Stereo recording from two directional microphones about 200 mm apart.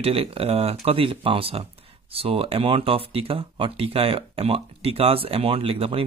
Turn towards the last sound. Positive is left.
turn(degrees=-30)  # may be behind; listen again after turning